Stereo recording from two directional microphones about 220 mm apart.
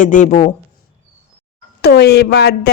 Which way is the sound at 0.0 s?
35° left (ahead or behind).